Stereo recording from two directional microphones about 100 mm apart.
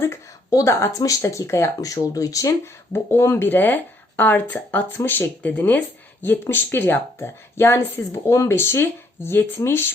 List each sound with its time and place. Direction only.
0.0 s speech: 30° left (ahead or behind)